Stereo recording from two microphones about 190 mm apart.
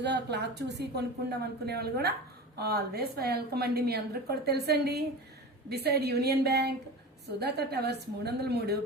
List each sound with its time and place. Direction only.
0.0 s a woman's voice: 65° right (ahead or behind)